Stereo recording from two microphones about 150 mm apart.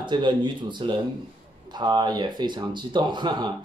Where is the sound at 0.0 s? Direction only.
30° right (ahead or behind).